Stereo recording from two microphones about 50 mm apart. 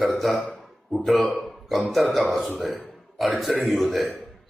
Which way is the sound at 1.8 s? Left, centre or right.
Centre.